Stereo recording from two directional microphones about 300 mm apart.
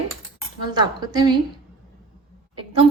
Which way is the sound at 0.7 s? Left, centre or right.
Centre.